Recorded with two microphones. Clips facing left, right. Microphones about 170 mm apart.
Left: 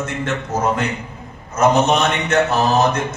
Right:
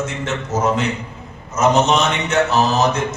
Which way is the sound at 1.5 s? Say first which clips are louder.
Even; 55° left (ahead or behind).